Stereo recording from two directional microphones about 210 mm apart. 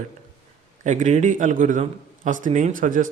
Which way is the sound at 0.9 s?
35° right (ahead or behind).